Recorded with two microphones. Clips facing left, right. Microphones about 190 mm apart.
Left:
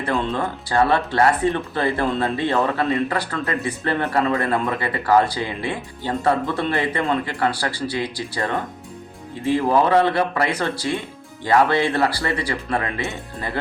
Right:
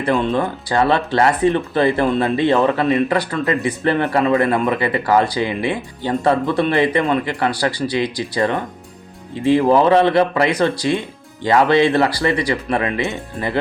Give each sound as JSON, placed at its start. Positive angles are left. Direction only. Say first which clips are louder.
{"t": 0.1, "sound": "speech", "louder": "right 6 dB", "side_deg": -20}